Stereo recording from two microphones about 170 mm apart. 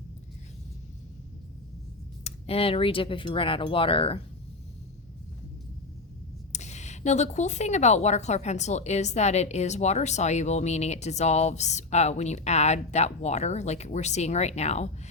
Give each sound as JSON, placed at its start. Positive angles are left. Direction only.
{"t": 2.2, "sound": "a woman's voice", "side_deg": 35}
{"t": 6.5, "sound": "a woman's voice", "side_deg": 40}